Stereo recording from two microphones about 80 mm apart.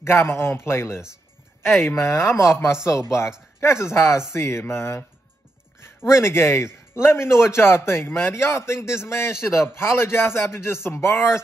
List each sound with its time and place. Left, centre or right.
0.0 s a man's voice: left